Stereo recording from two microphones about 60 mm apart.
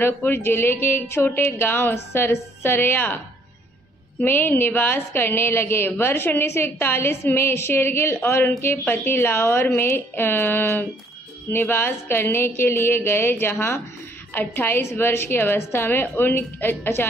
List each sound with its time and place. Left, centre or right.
0.0 s a woman's voice: left
4.2 s a woman's voice: left